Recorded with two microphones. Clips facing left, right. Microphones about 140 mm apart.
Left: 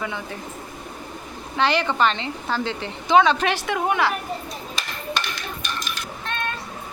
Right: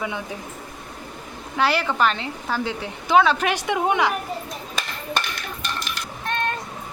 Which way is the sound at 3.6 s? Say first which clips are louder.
Right 2 dB; 20° right (ahead or behind).